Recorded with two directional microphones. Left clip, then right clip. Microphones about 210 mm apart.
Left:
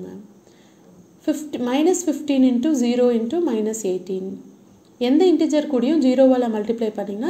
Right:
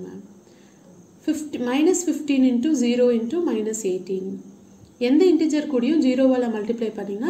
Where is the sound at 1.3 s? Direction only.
20° left (ahead or behind).